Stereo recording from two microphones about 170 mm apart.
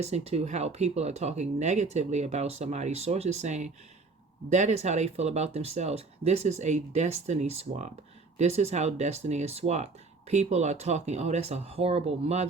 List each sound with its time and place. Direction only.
0.0 s speech: 40° right (ahead or behind)